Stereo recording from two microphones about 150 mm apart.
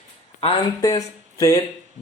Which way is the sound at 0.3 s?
35° left (ahead or behind).